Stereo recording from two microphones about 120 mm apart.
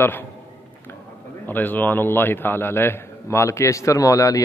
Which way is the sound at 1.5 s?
15° left (ahead or behind).